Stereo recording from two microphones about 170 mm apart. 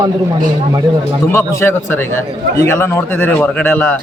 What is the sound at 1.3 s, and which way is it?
Speech, 15° left (ahead or behind).